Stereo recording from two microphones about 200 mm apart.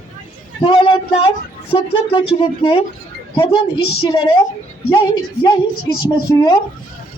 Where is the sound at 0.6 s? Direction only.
25° left (ahead or behind).